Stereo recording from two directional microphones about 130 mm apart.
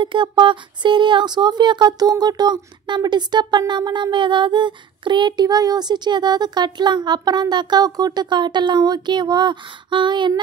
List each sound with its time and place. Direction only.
0.0 s speech: 40° right (ahead or behind)